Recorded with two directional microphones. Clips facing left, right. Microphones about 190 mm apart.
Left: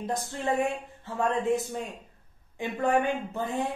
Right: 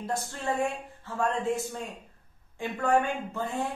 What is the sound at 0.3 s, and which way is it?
A woman's voice, 20° left (ahead or behind).